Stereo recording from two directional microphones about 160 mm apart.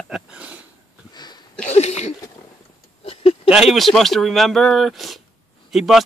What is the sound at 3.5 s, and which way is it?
Speech, centre (ahead or behind).